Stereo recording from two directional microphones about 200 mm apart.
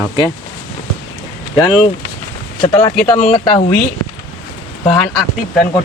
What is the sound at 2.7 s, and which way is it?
Speech, 15° left (ahead or behind).